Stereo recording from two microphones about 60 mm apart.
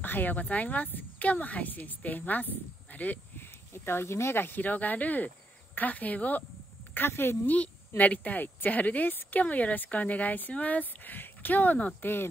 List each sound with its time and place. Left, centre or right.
0.0 s speech: left
3.7 s speech: left
6.9 s speech: left
8.0 s speech: left